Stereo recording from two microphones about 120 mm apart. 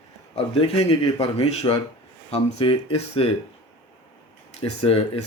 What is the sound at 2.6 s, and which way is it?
Speech, 40° left (ahead or behind).